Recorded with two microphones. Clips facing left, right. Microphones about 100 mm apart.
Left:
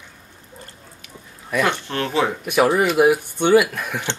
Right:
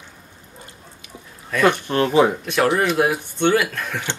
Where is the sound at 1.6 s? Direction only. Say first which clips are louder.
Right 7 dB; 15° right (ahead or behind).